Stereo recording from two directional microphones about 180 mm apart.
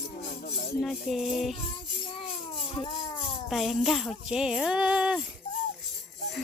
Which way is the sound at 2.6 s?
35° left (ahead or behind).